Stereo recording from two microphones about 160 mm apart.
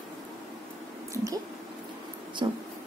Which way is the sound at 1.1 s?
20° right (ahead or behind).